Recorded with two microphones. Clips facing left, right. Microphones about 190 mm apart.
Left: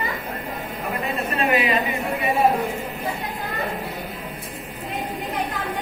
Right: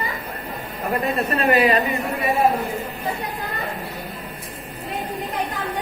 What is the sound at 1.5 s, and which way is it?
Speech, 40° right (ahead or behind).